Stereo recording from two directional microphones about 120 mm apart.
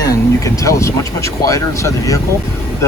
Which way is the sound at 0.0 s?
30° left (ahead or behind).